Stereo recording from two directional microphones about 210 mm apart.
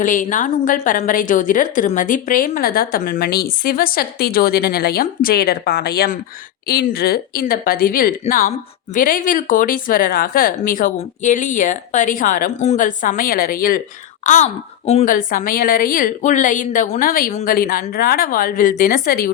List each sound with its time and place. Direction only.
0.0 s a woman's voice: 35° left (ahead or behind)